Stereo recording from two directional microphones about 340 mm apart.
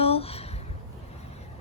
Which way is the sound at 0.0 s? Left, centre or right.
Centre.